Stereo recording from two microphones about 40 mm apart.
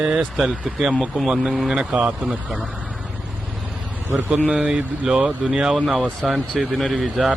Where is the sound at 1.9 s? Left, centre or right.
Right.